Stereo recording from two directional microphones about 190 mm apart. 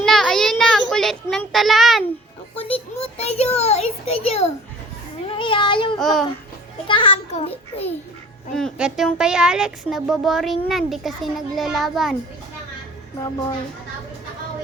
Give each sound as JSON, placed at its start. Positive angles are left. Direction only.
{"t": 0.0, "sound": "a sound", "side_deg": 0}
{"t": 0.6, "sound": "a child's voice", "side_deg": 5}
{"t": 3.0, "sound": "a sound", "side_deg": 35}
{"t": 5.4, "sound": "child singing", "side_deg": 25}
{"t": 6.0, "sound": "a child's voice", "side_deg": 0}
{"t": 6.8, "sound": "a child's voice", "side_deg": 25}
{"t": 8.5, "sound": "a child's voice", "side_deg": 0}